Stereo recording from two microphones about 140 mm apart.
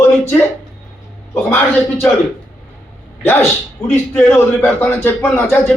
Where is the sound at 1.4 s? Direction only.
10° left (ahead or behind).